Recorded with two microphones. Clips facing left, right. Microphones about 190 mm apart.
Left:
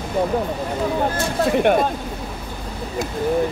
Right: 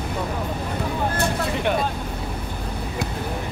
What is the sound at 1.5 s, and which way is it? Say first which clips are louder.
Speech: left 9 dB; 55° left (ahead or behind).